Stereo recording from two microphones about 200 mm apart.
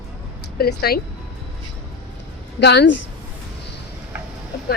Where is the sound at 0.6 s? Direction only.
50° left (ahead or behind).